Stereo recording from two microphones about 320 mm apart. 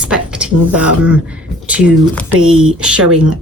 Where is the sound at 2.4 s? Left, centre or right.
Right.